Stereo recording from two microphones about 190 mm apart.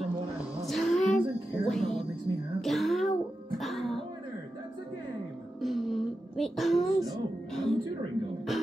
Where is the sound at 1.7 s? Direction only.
Centre (ahead or behind).